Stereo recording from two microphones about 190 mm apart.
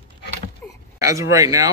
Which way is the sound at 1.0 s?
15° right (ahead or behind).